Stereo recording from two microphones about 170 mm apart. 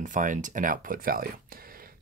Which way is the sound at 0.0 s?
50° right (ahead or behind).